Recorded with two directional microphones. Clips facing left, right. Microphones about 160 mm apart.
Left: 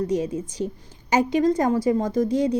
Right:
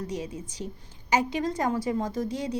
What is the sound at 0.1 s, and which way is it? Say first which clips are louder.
Speech: left 10 dB; 45° left (ahead or behind).